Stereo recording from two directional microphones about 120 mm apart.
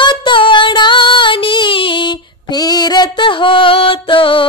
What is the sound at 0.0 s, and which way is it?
Female singing, 40° left (ahead or behind).